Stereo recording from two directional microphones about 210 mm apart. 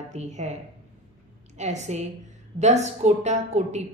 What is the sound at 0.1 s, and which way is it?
Speech, 35° right (ahead or behind).